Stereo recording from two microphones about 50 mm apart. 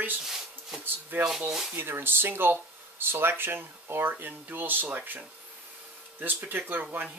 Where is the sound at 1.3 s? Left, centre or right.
Centre.